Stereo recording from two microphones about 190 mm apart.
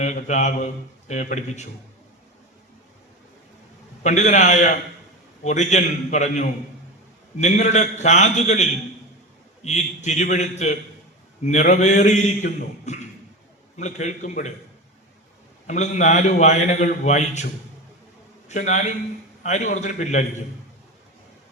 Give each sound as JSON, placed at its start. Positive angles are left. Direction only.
{"t": 0.0, "sound": "a man's voice", "side_deg": 40}
{"t": 4.0, "sound": "a man's voice", "side_deg": 40}
{"t": 9.6, "sound": "a man's voice", "side_deg": 35}
{"t": 15.6, "sound": "a man's voice", "side_deg": 40}